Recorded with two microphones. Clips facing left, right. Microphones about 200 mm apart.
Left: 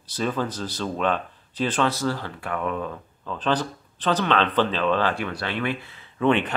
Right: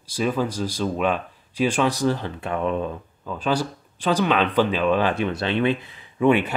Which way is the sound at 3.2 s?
10° right (ahead or behind).